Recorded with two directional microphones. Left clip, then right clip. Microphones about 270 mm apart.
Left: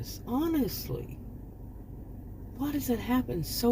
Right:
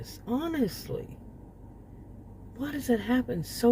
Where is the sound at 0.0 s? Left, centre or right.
Right.